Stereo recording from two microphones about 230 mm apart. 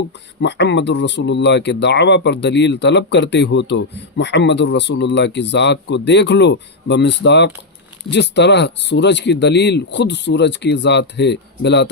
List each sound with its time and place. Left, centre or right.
0.4 s speech: left